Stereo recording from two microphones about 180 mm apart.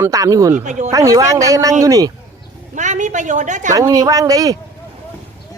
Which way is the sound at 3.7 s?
20° right (ahead or behind).